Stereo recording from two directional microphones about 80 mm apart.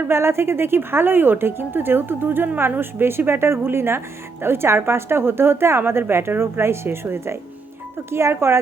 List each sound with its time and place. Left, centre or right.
0.1 s a woman's voice: right